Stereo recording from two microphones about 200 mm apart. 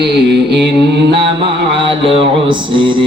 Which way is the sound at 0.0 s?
55° right (ahead or behind).